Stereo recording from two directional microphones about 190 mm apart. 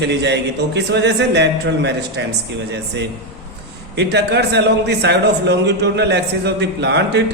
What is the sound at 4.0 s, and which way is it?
A man's voice, 65° right (ahead or behind).